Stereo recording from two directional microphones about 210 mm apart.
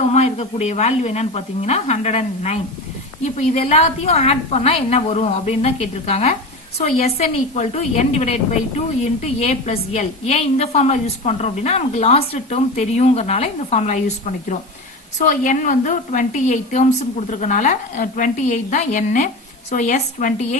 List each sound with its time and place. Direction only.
0.1 s a woman's voice: 30° left (ahead or behind)